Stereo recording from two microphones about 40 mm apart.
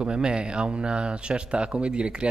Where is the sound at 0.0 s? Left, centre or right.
Right.